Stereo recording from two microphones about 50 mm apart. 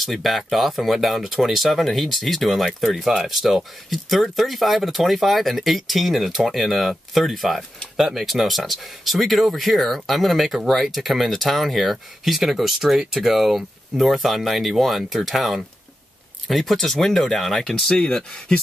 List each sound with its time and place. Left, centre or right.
0.0 s speech: centre